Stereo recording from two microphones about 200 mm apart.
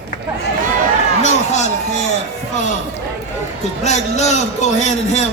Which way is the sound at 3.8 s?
35° left (ahead or behind).